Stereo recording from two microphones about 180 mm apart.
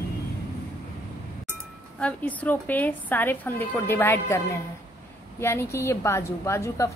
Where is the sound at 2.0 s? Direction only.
10° left (ahead or behind).